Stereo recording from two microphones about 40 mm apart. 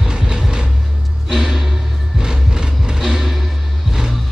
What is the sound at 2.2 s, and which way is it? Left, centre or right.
Music, centre.